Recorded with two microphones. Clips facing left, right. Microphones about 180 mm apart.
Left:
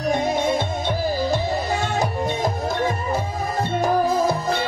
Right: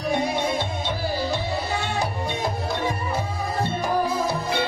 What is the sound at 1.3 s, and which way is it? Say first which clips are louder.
Music: left 4 dB; 45° left (ahead or behind).